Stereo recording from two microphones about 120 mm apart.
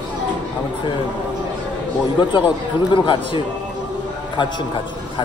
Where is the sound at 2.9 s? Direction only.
45° left (ahead or behind).